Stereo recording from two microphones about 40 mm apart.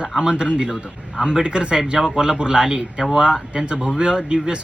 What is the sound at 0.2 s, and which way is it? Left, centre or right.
Speech, right.